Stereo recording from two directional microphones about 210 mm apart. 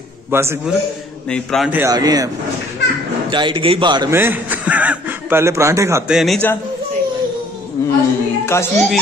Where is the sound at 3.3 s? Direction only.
25° right (ahead or behind).